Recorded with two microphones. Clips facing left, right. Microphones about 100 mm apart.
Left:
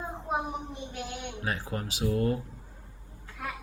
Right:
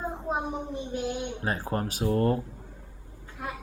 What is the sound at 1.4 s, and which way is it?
Speech, 35° right (ahead or behind).